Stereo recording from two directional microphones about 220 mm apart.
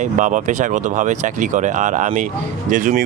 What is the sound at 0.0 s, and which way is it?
Speech, 35° right (ahead or behind).